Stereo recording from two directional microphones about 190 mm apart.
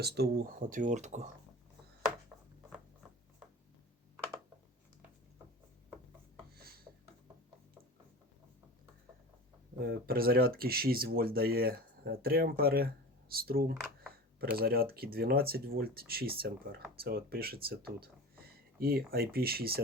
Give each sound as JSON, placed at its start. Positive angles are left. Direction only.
{"t": 0.0, "sound": "speech", "side_deg": -55}
{"t": 6.9, "sound": "a sound", "side_deg": -15}
{"t": 9.8, "sound": "speech", "side_deg": -50}